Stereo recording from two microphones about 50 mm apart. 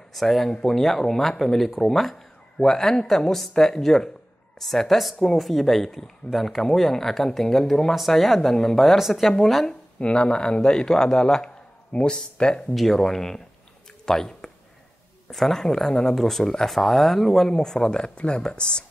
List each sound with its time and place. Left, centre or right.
0.1 s speech: centre
9.9 s speech: left
12.7 s speech: centre